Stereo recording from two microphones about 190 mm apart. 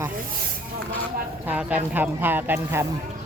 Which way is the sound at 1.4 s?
10° right (ahead or behind).